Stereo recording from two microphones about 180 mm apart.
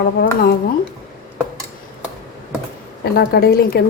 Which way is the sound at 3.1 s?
60° left (ahead or behind).